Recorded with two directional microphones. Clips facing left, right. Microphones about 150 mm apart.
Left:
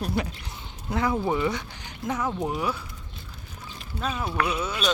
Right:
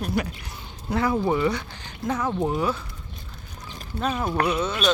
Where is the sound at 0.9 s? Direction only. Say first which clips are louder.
Right 2 dB; 20° left (ahead or behind).